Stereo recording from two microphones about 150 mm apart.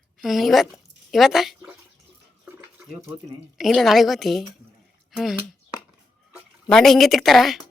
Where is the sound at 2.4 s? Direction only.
15° right (ahead or behind).